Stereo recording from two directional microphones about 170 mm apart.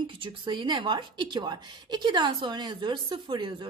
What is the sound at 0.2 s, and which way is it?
A woman's voice, 30° right (ahead or behind).